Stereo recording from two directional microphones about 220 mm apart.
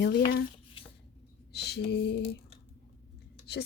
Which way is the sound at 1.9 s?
50° left (ahead or behind).